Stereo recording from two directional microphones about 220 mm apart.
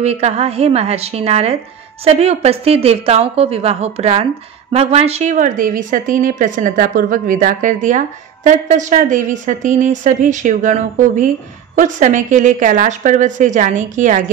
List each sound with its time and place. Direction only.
0.0 s a woman's voice: 30° right (ahead or behind)